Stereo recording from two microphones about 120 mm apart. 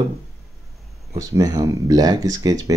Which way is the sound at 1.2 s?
30° right (ahead or behind).